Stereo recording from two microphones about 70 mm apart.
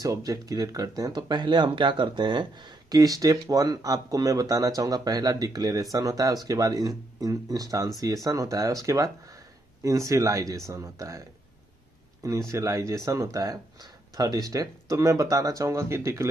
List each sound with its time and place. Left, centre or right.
0.0 s speech: right
2.9 s speech: right